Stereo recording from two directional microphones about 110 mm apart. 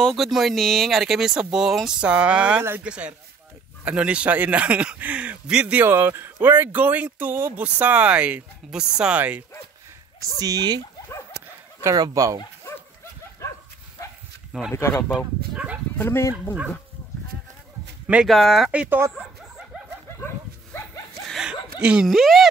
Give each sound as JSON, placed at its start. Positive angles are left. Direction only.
{"t": 0.0, "sound": "a man's voice", "side_deg": 0}
{"t": 10.4, "sound": "speech", "side_deg": -35}
{"t": 11.8, "sound": "speech", "side_deg": -30}
{"t": 13.4, "sound": "dog", "side_deg": 25}
{"t": 14.7, "sound": "speech", "side_deg": 25}
{"t": 15.0, "sound": "speech", "side_deg": -10}
{"t": 16.0, "sound": "speech", "side_deg": 20}
{"t": 18.0, "sound": "speech", "side_deg": -5}
{"t": 18.7, "sound": "a man's voice", "side_deg": -15}
{"t": 21.3, "sound": "chuckle", "side_deg": -5}
{"t": 21.7, "sound": "speech", "side_deg": -10}